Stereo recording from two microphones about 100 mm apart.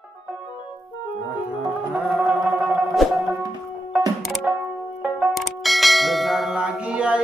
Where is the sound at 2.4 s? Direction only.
15° right (ahead or behind).